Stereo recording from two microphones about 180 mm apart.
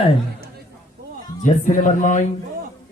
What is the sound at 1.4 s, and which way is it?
Speech, 45° left (ahead or behind).